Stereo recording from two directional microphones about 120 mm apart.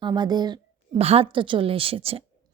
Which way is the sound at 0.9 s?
55° right (ahead or behind).